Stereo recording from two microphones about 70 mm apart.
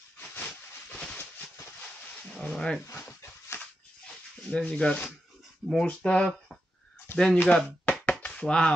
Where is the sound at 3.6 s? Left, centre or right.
Centre.